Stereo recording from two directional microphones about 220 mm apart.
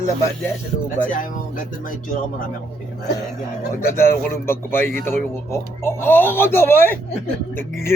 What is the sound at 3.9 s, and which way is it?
Speech, 10° left (ahead or behind).